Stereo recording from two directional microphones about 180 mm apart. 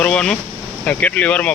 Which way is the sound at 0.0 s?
5° left (ahead or behind).